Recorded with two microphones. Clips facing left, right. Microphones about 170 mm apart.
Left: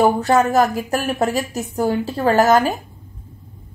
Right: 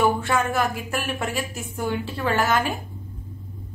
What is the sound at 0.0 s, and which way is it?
A woman's voice, 40° left (ahead or behind).